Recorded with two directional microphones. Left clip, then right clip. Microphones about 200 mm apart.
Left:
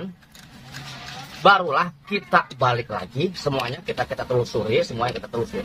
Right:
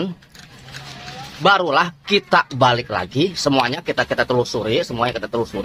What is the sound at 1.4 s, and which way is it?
A man's voice, 45° right (ahead or behind).